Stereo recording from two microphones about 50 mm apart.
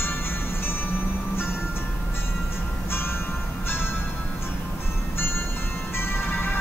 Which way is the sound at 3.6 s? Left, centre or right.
Left.